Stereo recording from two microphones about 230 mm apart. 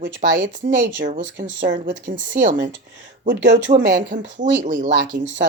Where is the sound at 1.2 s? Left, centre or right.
Right.